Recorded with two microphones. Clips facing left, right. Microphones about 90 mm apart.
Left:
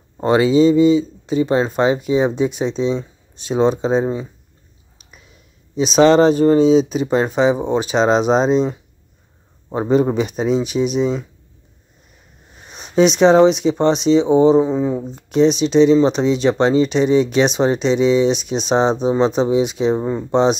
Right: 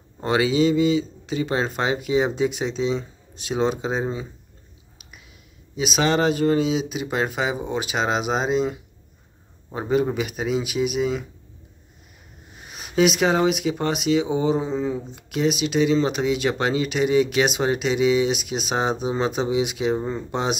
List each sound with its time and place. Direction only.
0.2 s speech: 25° left (ahead or behind)
5.8 s speech: 30° left (ahead or behind)
9.7 s speech: 35° left (ahead or behind)
12.7 s a sound: 30° left (ahead or behind)
13.2 s speech: 25° left (ahead or behind)
14.9 s speech: 35° left (ahead or behind)